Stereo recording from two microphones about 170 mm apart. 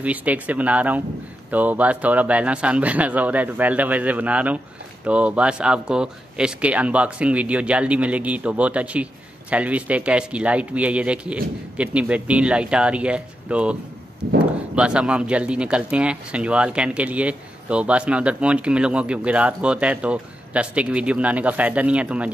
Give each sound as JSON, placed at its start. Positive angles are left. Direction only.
{"t": 0.0, "sound": "speech", "side_deg": -10}
{"t": 14.8, "sound": "speech", "side_deg": -5}